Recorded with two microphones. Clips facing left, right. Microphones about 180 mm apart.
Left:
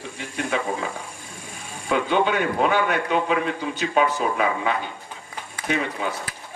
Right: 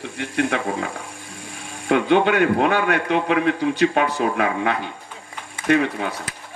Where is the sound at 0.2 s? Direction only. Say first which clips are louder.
Right 5 dB; 65° right (ahead or behind).